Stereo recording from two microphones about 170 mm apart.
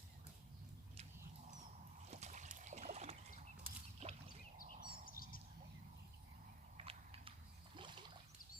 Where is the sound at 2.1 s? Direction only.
45° right (ahead or behind).